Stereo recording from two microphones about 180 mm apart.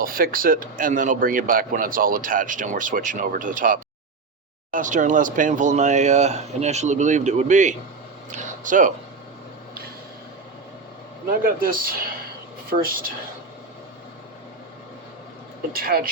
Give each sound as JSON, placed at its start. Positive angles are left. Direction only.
{"t": 0.0, "sound": "speech", "side_deg": -55}
{"t": 8.3, "sound": "a sound", "side_deg": -45}
{"t": 11.4, "sound": "speech", "side_deg": -50}
{"t": 15.7, "sound": "speech", "side_deg": -55}